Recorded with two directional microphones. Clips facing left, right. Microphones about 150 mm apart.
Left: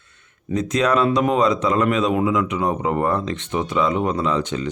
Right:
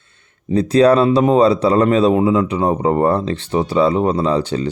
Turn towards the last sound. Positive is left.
turn(degrees=-35)  # may be behind; listen again after turning